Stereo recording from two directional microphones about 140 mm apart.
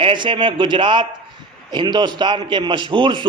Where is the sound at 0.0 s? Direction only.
35° right (ahead or behind).